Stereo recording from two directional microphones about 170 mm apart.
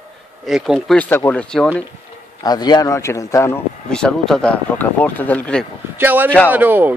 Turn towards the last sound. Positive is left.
turn(degrees=-10)  # may be behind; listen again after turning